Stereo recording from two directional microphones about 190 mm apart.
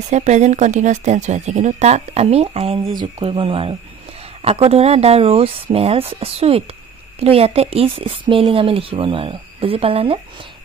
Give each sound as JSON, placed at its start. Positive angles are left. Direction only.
{"t": 0.1, "sound": "a woman's voice", "side_deg": -35}